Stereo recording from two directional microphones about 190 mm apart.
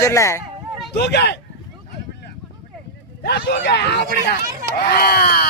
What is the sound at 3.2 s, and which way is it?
Speech, 60° left (ahead or behind).